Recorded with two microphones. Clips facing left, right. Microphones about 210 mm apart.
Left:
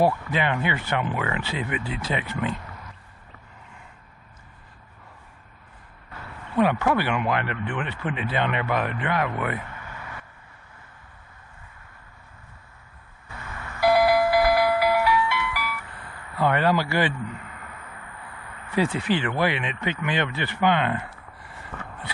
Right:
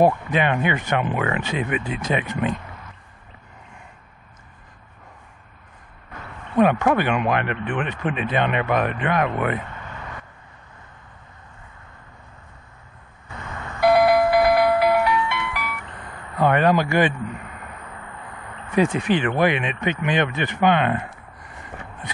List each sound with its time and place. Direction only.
0.3 s speech: 20° right (ahead or behind)
6.5 s speech: 20° right (ahead or behind)
13.3 s doorbell: 20° right (ahead or behind)
18.8 s speech: 20° right (ahead or behind)